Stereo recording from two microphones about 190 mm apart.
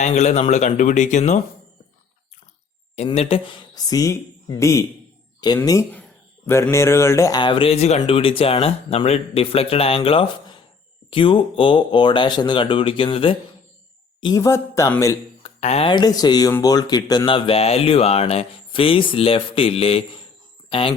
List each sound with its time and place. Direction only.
0.0 s speech: 40° left (ahead or behind)
2.9 s speech: 35° left (ahead or behind); by 15.1 s 15° left (ahead or behind)
15.4 s speech: 35° left (ahead or behind)